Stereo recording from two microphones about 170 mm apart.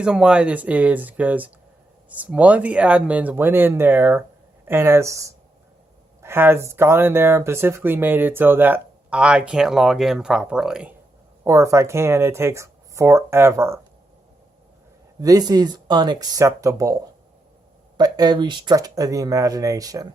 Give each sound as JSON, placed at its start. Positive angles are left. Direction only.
{"t": 0.0, "sound": "speech", "side_deg": -5}
{"t": 11.4, "sound": "speech", "side_deg": -15}
{"t": 15.2, "sound": "speech", "side_deg": -20}